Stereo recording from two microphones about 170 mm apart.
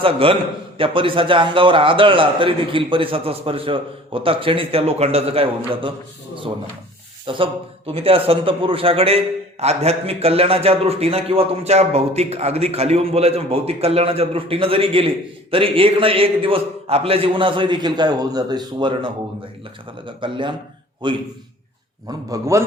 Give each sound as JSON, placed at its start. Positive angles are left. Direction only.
{"t": 0.0, "sound": "a man's voice", "side_deg": -30}
{"t": 7.3, "sound": "a man's voice", "side_deg": -30}
{"t": 22.3, "sound": "a man's voice", "side_deg": -15}